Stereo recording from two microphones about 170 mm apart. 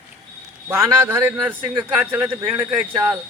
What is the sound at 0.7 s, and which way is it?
A man's voice, 15° right (ahead or behind).